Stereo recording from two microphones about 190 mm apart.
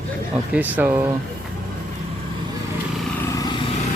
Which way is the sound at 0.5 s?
10° right (ahead or behind).